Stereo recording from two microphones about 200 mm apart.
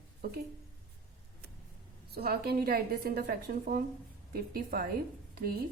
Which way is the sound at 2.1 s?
50° right (ahead or behind).